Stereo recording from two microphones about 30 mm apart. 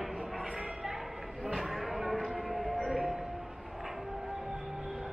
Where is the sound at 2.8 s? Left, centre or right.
Centre.